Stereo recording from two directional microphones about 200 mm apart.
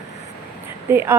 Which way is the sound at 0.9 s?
10° right (ahead or behind).